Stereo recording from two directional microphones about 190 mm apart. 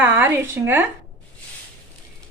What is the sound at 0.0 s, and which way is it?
Speech, 10° right (ahead or behind).